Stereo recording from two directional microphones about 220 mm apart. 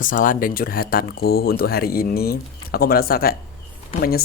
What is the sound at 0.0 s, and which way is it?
Speech, 40° left (ahead or behind).